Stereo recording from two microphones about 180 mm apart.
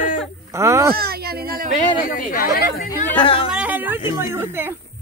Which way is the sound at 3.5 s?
10° right (ahead or behind).